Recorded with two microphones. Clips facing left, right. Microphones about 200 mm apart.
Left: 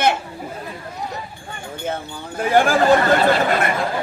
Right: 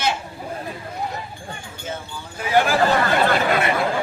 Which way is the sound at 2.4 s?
50° left (ahead or behind).